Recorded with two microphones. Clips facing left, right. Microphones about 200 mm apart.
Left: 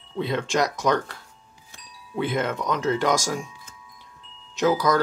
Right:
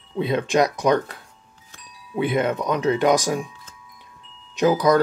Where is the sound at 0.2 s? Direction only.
15° right (ahead or behind).